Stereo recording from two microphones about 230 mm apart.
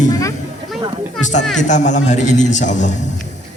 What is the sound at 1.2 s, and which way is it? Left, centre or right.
A man's voice, left.